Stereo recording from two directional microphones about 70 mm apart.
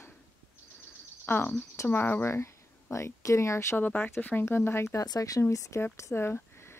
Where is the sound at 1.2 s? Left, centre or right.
Left.